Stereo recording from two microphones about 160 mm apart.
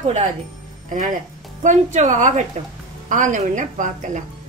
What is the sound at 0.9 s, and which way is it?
Speech, 55° right (ahead or behind).